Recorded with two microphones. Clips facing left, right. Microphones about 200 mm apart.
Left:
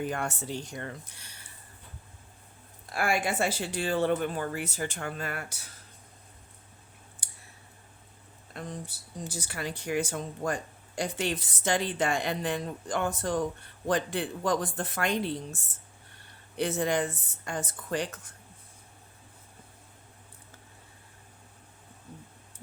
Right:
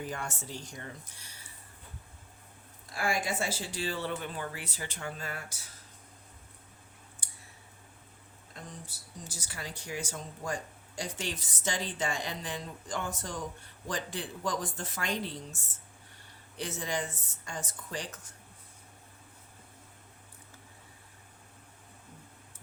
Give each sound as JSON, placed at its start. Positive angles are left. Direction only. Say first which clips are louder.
{"t": 0.0, "sound": "speech", "louder": "left 6 dB", "side_deg": 60}
{"t": 2.9, "sound": "speech", "louder": "left 4 dB", "side_deg": 65}
{"t": 8.5, "sound": "speech", "louder": "left 8 dB", "side_deg": 65}
{"t": 16.6, "sound": "speech", "louder": "left 8 dB", "side_deg": 60}